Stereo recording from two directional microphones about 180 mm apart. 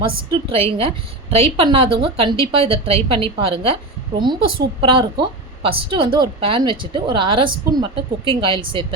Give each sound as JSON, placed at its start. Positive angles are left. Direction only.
{"t": 0.3, "sound": "a woman's voice", "side_deg": -30}